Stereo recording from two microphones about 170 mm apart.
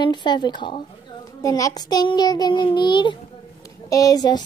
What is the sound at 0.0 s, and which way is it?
Child singing, 25° left (ahead or behind).